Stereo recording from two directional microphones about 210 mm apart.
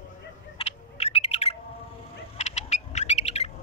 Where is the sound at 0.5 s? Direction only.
30° left (ahead or behind).